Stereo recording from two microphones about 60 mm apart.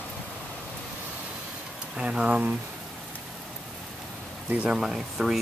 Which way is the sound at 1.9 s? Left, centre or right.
Centre.